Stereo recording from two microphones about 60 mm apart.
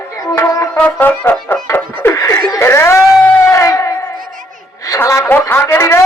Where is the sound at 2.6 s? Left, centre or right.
Left.